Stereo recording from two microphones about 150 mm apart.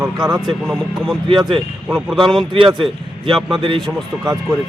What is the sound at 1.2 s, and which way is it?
Speech, 35° right (ahead or behind).